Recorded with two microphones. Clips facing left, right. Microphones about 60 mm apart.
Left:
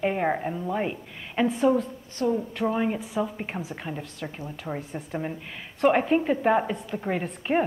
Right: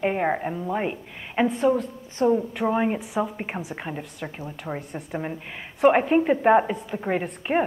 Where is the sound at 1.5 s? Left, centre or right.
Centre.